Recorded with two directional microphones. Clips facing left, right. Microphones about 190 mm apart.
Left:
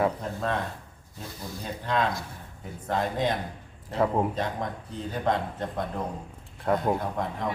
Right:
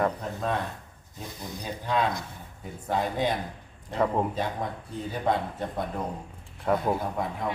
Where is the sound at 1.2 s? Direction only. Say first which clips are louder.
Even; 20° right (ahead or behind).